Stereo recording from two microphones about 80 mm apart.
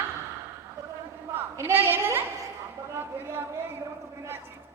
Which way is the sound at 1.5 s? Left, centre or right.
Right.